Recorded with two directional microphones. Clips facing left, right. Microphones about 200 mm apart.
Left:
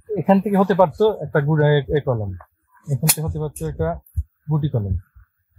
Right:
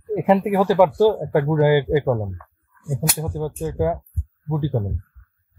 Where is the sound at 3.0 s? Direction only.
15° right (ahead or behind).